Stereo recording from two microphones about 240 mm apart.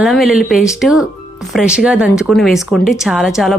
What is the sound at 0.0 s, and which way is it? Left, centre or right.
A woman's voice, centre.